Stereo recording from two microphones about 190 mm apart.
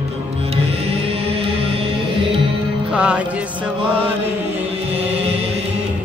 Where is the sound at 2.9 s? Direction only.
5° right (ahead or behind).